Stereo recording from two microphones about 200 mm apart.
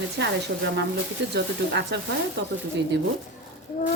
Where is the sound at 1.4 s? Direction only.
60° right (ahead or behind).